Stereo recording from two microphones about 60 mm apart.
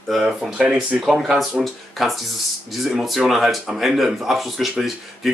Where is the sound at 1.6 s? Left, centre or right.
Centre.